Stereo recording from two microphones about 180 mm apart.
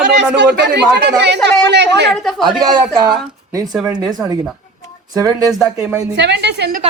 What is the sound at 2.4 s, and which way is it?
Speech, 25° right (ahead or behind).